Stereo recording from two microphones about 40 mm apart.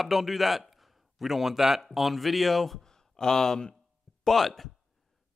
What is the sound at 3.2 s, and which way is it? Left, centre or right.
Speech, centre.